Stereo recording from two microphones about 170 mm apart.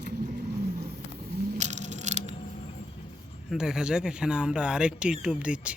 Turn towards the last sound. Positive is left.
turn(degrees=-5)  # may be behind; listen again after turning